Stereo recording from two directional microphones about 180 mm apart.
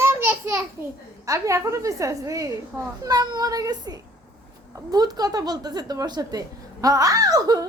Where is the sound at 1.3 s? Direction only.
15° right (ahead or behind).